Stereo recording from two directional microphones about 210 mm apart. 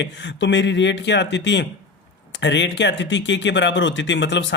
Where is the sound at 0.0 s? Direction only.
55° left (ahead or behind).